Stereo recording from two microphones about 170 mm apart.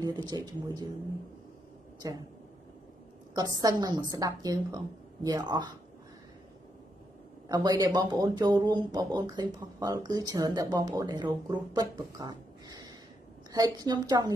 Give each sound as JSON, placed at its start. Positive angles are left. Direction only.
{"t": 0.0, "sound": "speech", "side_deg": -25}
{"t": 2.0, "sound": "speech", "side_deg": -20}
{"t": 3.3, "sound": "speech", "side_deg": -25}
{"t": 7.4, "sound": "speech", "side_deg": -20}